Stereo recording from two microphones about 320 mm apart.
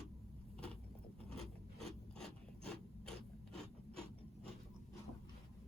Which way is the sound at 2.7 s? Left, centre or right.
Centre.